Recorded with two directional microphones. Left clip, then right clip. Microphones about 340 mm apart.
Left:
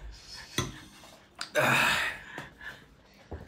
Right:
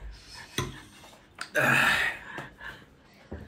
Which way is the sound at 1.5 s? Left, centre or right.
Centre.